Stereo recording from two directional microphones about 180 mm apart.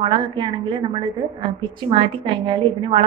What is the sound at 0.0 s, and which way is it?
Speech, 25° right (ahead or behind).